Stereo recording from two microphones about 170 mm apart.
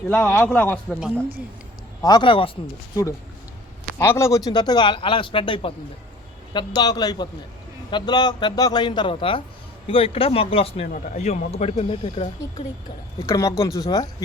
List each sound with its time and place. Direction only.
0.1 s a man's voice: 10° left (ahead or behind)
2.0 s a man's voice: 25° left (ahead or behind)
3.9 s a man's voice: 15° left (ahead or behind); by 10.8 s 35° left (ahead or behind)
10.8 s speech: 50° left (ahead or behind); by 12.6 s 35° left (ahead or behind)
13.2 s a man's voice: 20° left (ahead or behind)